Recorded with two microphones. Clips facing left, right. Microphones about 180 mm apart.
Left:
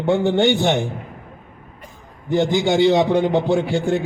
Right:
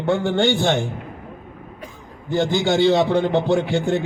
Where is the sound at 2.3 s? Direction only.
15° left (ahead or behind).